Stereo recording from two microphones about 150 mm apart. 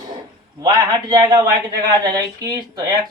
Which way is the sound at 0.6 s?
25° right (ahead or behind).